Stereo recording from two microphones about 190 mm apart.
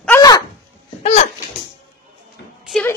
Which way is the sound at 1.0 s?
40° left (ahead or behind).